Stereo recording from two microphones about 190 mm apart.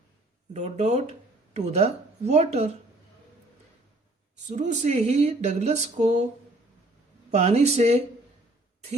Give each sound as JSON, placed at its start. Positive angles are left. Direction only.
{"t": 0.5, "sound": "speech", "side_deg": -35}
{"t": 4.4, "sound": "speech", "side_deg": -40}
{"t": 7.3, "sound": "speech", "side_deg": -35}